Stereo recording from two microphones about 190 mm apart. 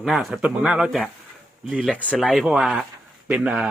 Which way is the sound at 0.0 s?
Centre (ahead or behind).